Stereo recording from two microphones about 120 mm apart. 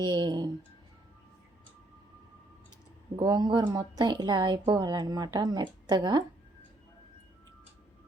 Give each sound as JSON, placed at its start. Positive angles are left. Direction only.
{"t": 0.0, "sound": "a woman's voice", "side_deg": -40}
{"t": 3.2, "sound": "a woman's voice", "side_deg": -35}